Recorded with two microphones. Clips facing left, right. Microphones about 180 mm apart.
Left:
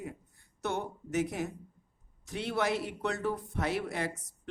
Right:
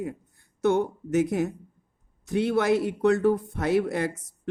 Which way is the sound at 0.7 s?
50° right (ahead or behind).